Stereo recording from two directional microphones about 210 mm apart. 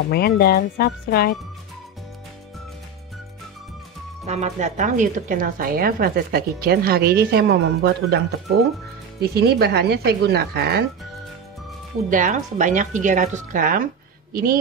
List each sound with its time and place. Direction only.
0.1 s speech: 50° left (ahead or behind)
4.3 s a woman's voice: 35° right (ahead or behind); by 8.2 s 50° right (ahead or behind)
9.3 s a woman's voice: 50° right (ahead or behind)
12.1 s speech: 40° right (ahead or behind)